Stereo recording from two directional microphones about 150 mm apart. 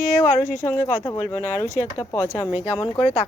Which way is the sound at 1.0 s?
20° left (ahead or behind).